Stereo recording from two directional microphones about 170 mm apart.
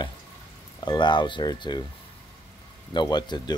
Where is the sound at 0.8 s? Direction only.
25° left (ahead or behind).